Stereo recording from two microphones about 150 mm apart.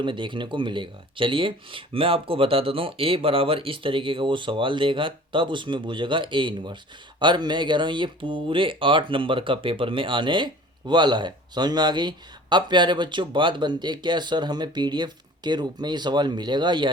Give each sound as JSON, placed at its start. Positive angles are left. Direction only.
{"t": 0.0, "sound": "speech", "side_deg": -35}